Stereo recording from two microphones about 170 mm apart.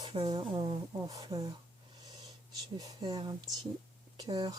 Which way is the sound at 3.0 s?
25° right (ahead or behind).